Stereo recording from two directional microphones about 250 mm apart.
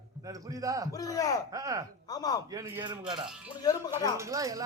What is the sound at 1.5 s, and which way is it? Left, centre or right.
Speech, centre.